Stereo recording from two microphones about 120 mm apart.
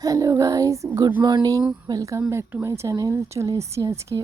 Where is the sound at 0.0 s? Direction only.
30° right (ahead or behind).